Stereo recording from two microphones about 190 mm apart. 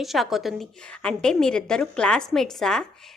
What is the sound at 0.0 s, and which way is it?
A woman's voice, centre (ahead or behind).